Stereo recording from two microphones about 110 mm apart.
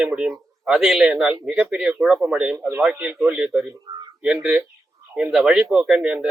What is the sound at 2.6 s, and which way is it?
Speech, 20° right (ahead or behind).